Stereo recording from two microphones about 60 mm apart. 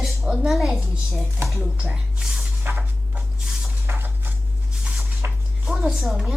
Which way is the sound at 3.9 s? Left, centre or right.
Right.